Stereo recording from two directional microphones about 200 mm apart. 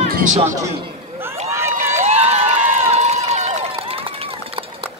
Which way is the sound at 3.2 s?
35° right (ahead or behind).